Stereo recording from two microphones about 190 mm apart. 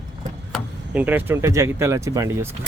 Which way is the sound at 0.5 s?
10° right (ahead or behind).